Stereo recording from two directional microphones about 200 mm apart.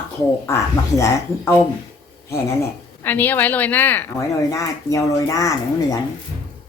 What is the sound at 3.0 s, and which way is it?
A woman's voice, 10° left (ahead or behind).